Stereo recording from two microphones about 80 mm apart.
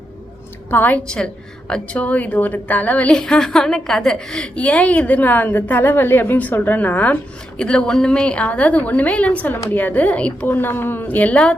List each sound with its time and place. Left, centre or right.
0.7 s a woman's voice: left
3.2 s a woman's voice: centre